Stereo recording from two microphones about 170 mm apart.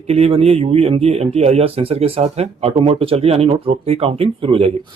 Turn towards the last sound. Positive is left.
turn(degrees=-35)  # may be behind; listen again after turning